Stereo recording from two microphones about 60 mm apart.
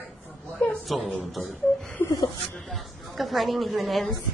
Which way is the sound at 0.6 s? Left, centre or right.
Left.